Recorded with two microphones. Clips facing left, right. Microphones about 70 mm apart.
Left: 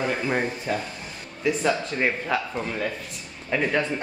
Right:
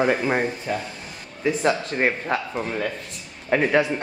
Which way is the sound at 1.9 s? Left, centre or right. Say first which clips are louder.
Right 2 dB; right.